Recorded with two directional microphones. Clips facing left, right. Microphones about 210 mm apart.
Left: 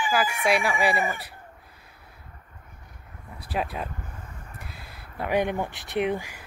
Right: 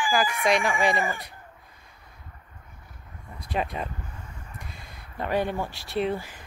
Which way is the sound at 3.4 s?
5° left (ahead or behind).